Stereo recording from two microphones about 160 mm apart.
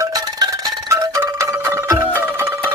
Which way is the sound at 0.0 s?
25° right (ahead or behind).